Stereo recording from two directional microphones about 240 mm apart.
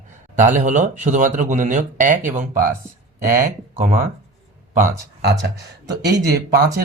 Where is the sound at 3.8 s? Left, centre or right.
Right.